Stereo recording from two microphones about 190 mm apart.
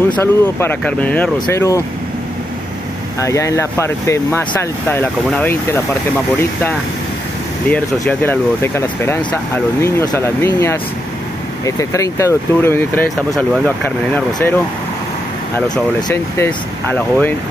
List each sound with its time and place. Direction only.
0.1 s speech: 15° left (ahead or behind)
3.2 s speech: 15° left (ahead or behind)
7.7 s speech: 10° left (ahead or behind)
16.3 s speech: 10° left (ahead or behind)